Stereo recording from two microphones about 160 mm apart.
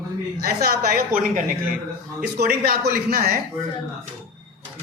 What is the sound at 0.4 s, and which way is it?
Speech, 75° right (ahead or behind).